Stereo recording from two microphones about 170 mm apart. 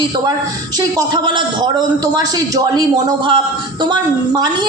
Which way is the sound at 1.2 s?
25° right (ahead or behind).